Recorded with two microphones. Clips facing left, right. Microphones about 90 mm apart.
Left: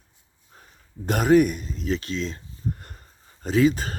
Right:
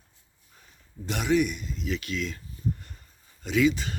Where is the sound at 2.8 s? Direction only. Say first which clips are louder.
Left 4 dB; 50° left (ahead or behind).